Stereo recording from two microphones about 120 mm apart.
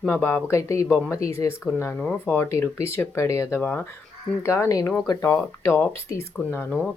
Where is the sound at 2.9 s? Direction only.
25° left (ahead or behind).